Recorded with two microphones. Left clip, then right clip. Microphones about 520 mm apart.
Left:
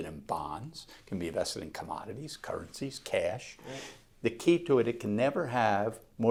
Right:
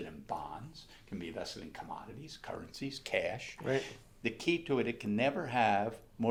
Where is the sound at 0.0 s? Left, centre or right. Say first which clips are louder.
Left 5 dB; left.